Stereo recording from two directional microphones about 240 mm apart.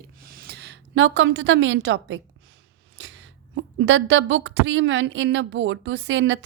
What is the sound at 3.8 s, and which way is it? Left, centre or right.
A woman's voice, right.